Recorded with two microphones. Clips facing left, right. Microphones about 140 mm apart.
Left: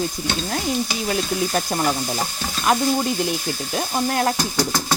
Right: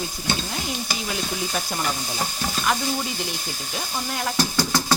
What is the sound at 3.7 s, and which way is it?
Speech, 55° left (ahead or behind).